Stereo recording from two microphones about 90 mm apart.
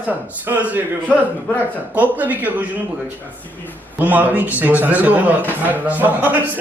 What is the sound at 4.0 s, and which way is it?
A man's voice, 20° right (ahead or behind).